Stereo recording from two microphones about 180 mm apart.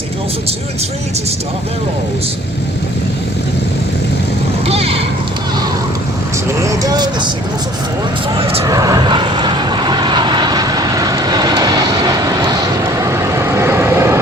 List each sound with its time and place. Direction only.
4.6 s vehicle: 35° right (ahead or behind)
6.5 s vehicle: 15° right (ahead or behind)
8.4 s speech: 30° right (ahead or behind)
8.6 s vehicle: 20° right (ahead or behind)